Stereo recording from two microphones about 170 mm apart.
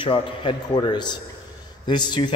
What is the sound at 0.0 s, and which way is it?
A man's voice, 30° left (ahead or behind).